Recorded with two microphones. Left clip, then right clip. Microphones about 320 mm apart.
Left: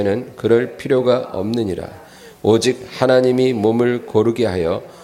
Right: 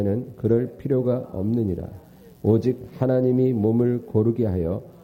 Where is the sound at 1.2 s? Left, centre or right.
Centre.